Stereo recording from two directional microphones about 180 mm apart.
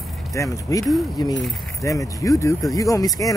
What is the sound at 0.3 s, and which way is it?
Speech, 20° left (ahead or behind).